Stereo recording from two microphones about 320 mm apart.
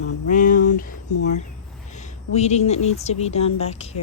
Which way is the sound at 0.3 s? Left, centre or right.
Left.